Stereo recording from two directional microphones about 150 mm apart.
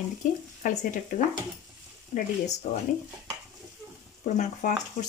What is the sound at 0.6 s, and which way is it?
Speech, 60° left (ahead or behind).